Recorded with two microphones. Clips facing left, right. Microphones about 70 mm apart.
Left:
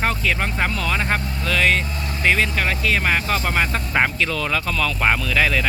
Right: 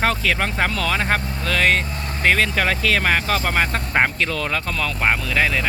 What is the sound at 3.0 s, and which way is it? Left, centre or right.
Speech, right.